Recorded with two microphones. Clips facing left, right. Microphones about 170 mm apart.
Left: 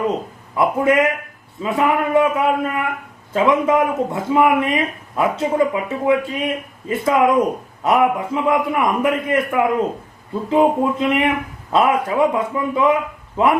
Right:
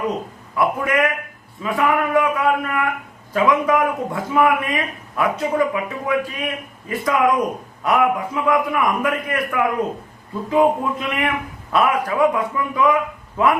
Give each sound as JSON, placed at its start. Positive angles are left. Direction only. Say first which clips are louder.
{"t": 0.5, "sound": "speech", "louder": "left 4 dB", "side_deg": 20}